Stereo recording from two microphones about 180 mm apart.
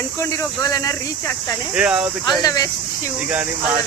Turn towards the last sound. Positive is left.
turn(degrees=20)  # may be behind; listen again after turning